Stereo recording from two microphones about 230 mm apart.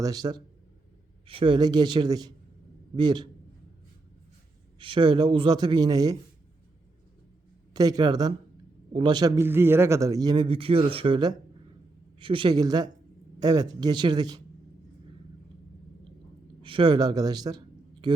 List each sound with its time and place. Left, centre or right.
0.0 s a man's voice: centre
4.8 s a man's voice: right
7.7 s a man's voice: centre
16.6 s a man's voice: right